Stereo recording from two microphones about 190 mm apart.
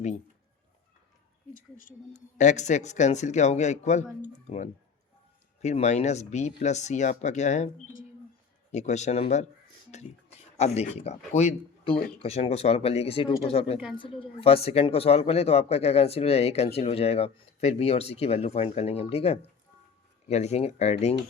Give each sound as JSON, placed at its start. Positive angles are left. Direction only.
{"t": 2.1, "sound": "speech", "side_deg": 40}
{"t": 8.7, "sound": "speech", "side_deg": 35}